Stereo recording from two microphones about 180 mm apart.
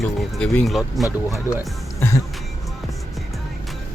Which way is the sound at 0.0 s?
Centre (ahead or behind).